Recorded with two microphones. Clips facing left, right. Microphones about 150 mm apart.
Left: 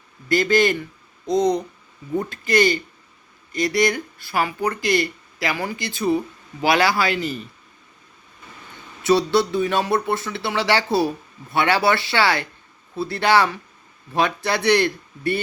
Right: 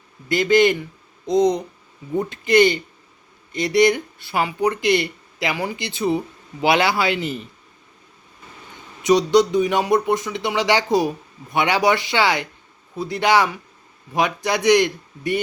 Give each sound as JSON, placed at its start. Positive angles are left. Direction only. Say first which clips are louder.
{"t": 0.3, "sound": "speech", "louder": "right 2 dB", "side_deg": -20}
{"t": 9.0, "sound": "speech", "louder": "right 3 dB", "side_deg": -15}